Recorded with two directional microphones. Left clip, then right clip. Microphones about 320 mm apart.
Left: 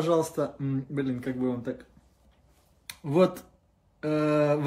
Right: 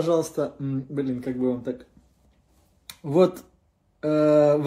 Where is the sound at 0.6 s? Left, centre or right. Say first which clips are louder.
Right 2 dB; centre.